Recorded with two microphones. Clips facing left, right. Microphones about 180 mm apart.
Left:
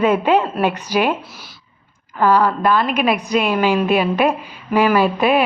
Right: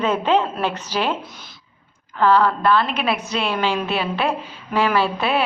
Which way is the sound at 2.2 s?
10° left (ahead or behind).